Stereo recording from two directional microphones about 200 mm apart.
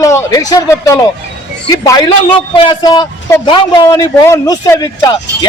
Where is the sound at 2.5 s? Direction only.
25° left (ahead or behind).